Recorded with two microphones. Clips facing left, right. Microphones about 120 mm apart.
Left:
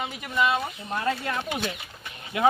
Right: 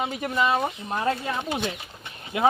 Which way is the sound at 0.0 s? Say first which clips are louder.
Right 1 dB; 35° right (ahead or behind).